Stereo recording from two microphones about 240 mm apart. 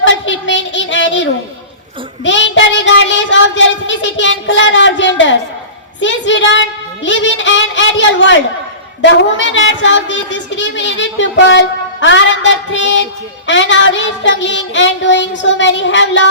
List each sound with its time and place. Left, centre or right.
0.0 s child singing: left
2.2 s a sound: left
6.0 s a woman's voice: left